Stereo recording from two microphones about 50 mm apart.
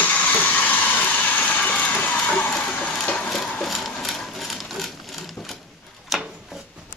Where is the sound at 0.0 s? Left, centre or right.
Left.